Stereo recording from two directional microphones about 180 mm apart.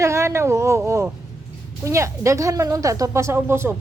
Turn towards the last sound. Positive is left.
turn(degrees=-15)  # may be behind; listen again after turning